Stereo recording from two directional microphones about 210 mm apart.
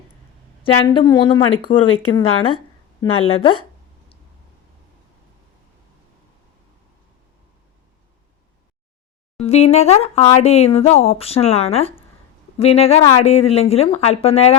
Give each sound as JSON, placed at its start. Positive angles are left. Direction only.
{"t": 0.6, "sound": "speech", "side_deg": 20}
{"t": 9.4, "sound": "speech", "side_deg": 30}